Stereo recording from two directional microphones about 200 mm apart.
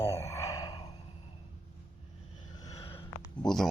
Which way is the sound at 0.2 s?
15° left (ahead or behind).